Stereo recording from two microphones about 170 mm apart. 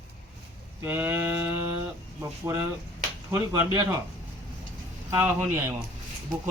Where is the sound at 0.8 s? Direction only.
10° right (ahead or behind).